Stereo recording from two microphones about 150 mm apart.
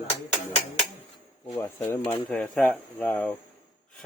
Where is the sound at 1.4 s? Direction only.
20° left (ahead or behind).